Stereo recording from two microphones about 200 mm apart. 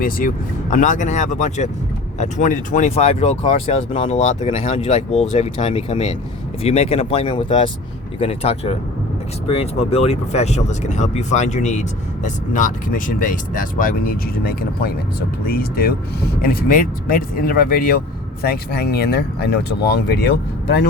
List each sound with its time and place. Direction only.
0.0 s speech: 45° left (ahead or behind)